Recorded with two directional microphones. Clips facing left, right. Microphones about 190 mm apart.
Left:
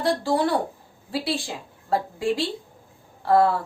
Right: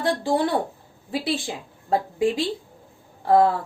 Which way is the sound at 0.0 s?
20° right (ahead or behind).